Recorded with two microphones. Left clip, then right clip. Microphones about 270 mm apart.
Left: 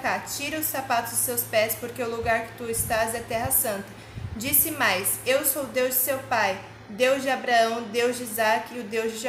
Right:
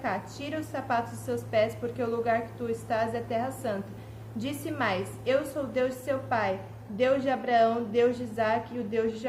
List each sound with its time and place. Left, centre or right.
0.0 s a woman's voice: centre